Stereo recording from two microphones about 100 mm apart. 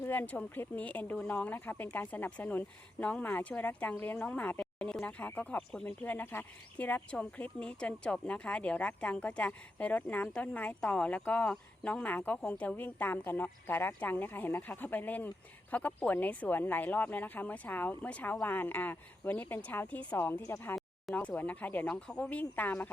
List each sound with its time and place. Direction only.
0.0 s a woman's voice: 20° left (ahead or behind)
20.7 s a sound: centre (ahead or behind)
21.2 s speech: 15° left (ahead or behind)